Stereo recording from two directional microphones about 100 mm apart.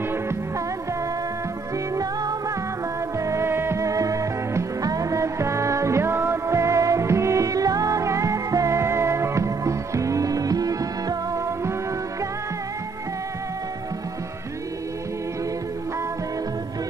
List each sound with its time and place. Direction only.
3.3 s music: 25° right (ahead or behind)